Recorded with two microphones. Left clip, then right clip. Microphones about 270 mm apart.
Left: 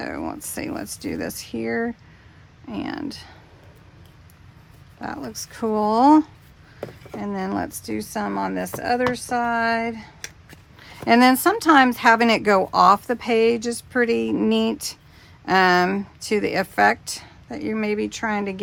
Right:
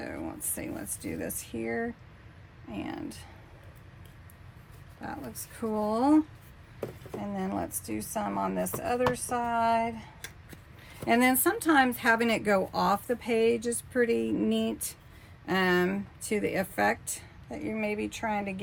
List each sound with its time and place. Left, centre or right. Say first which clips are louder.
0.0 s a sound: left 9 dB; left
0.5 s speech: left 8 dB; left
4.9 s speech: left 9 dB; left